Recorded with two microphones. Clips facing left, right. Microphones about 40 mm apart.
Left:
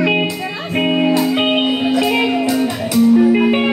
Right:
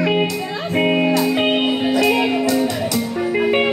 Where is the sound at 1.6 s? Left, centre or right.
Centre.